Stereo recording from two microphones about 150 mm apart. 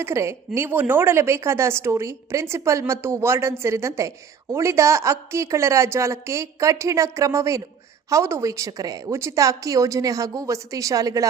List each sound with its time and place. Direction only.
0.0 s a woman's voice: 20° right (ahead or behind)